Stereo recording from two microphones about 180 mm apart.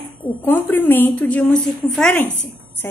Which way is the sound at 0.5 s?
10° left (ahead or behind).